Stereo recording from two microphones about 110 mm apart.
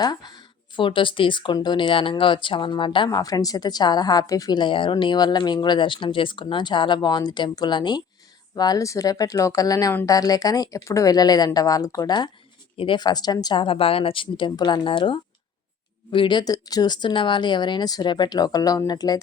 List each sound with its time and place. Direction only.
0.0 s speech: 40° left (ahead or behind)
12.7 s speech: 50° left (ahead or behind)
16.4 s speech: 35° left (ahead or behind)